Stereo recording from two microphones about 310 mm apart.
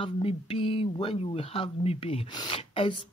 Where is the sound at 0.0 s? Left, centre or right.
Centre.